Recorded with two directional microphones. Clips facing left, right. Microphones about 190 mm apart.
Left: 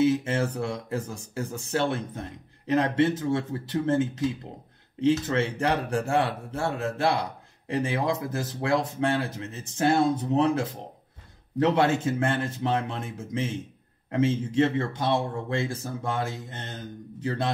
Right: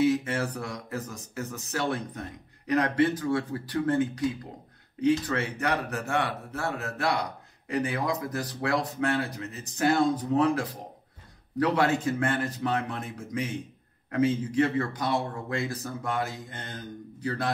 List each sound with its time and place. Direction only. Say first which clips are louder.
0.0 s a man's voice: left 2 dB; 25° left (ahead or behind)